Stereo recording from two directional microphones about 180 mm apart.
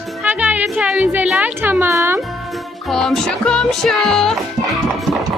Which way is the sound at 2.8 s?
Centre (ahead or behind).